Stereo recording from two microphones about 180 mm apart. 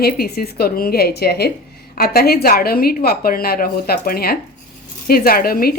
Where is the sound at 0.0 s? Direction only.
60° left (ahead or behind).